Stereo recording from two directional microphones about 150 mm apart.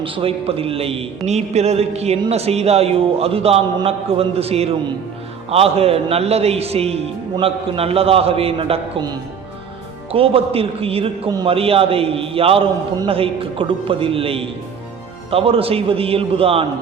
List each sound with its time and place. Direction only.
0.0 s a man's voice: 35° right (ahead or behind)
10.1 s a man's voice: 40° right (ahead or behind)
11.3 s a man's voice: 25° right (ahead or behind)
11.5 s a man's voice: 40° right (ahead or behind)